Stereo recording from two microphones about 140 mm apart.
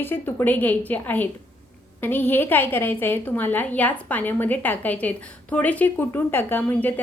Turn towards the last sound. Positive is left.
turn(degrees=10)  # may be behind; listen again after turning